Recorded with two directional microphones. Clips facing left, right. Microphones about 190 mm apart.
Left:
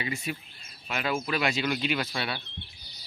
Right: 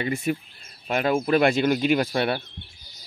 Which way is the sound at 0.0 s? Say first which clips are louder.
Right 8 dB; 50° right (ahead or behind).